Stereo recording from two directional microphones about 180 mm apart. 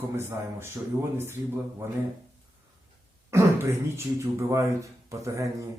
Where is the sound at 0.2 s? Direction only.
15° right (ahead or behind).